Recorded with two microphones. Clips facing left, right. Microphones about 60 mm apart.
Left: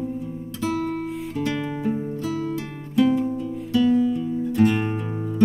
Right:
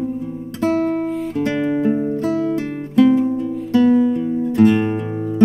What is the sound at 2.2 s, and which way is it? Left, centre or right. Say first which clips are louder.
Music: right 6 dB; right.